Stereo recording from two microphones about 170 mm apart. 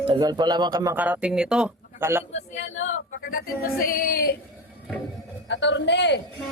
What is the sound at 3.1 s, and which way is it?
Speech, 55° left (ahead or behind).